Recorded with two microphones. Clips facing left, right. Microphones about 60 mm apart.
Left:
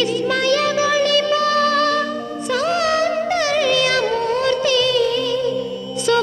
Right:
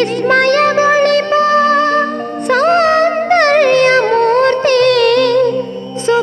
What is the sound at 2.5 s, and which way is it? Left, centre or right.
Music, right.